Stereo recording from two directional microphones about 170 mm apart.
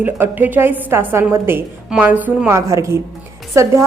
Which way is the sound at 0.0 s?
10° right (ahead or behind).